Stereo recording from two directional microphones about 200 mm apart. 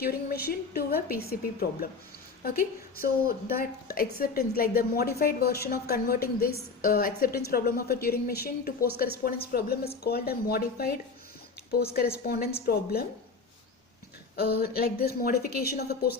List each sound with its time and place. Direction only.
0.0 s a woman's voice: 50° left (ahead or behind)
14.3 s a woman's voice: 50° left (ahead or behind)